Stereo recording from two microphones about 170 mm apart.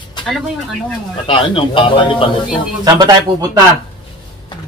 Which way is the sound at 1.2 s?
30° left (ahead or behind).